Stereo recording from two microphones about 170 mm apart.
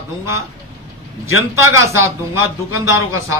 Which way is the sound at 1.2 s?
15° right (ahead or behind).